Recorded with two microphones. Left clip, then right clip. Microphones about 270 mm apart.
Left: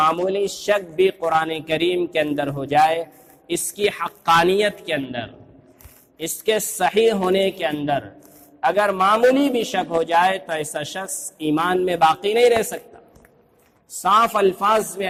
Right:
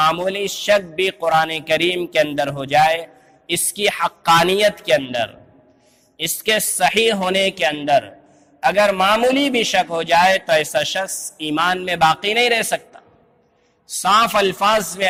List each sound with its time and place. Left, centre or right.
0.0 s a man's voice: right
14.0 s a man's voice: right